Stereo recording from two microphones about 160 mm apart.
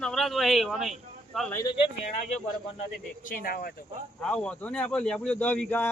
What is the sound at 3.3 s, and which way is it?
Speech, 65° left (ahead or behind).